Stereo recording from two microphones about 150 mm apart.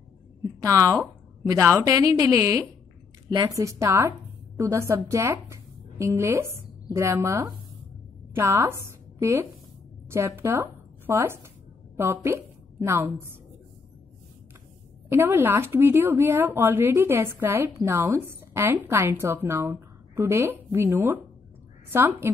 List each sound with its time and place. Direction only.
0.6 s a woman's voice: 20° right (ahead or behind)
15.0 s speech: 15° right (ahead or behind)